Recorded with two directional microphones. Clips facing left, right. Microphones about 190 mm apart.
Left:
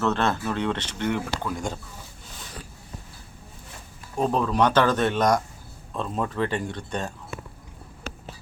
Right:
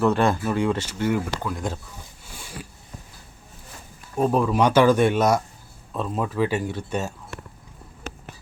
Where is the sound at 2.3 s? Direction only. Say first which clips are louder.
Right 3 dB; 10° right (ahead or behind).